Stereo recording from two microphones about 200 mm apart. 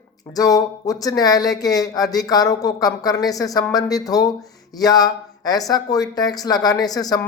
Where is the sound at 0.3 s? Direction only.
20° left (ahead or behind).